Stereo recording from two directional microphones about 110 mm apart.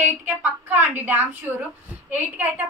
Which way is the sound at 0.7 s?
15° right (ahead or behind).